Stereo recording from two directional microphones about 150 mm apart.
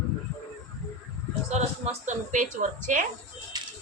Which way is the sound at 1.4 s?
50° right (ahead or behind).